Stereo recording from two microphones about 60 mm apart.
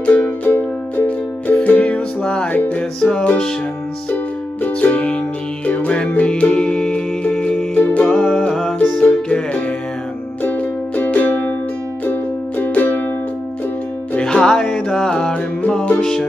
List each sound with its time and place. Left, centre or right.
0.5 s music: left
3.0 s music: centre
4.6 s music: left
7.8 s music: left
8.5 s music: centre
9.0 s music: left
10.4 s music: left
14.2 s music: centre
16.0 s music: centre